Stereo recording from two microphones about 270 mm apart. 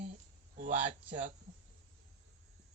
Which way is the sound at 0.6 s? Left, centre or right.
Right.